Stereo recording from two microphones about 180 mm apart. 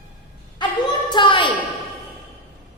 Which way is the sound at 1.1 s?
25° left (ahead or behind).